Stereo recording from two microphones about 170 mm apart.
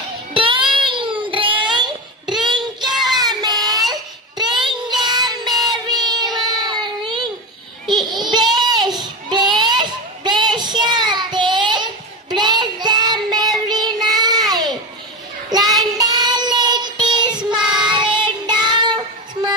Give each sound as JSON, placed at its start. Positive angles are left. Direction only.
{"t": 0.3, "sound": "child singing", "side_deg": -30}
{"t": 3.5, "sound": "a sound", "side_deg": 0}
{"t": 4.4, "sound": "child singing", "side_deg": -25}